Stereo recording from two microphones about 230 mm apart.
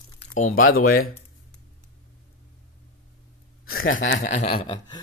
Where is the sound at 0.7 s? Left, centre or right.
Left.